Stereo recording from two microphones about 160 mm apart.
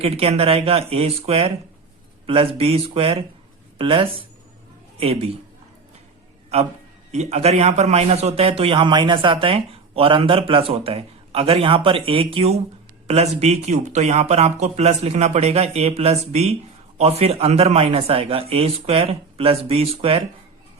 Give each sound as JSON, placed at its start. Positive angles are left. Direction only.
{"t": 0.0, "sound": "a man's voice", "side_deg": -40}
{"t": 6.5, "sound": "a man's voice", "side_deg": -40}